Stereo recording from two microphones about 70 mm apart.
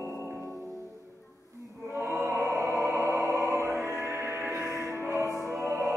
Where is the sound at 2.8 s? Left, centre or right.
Right.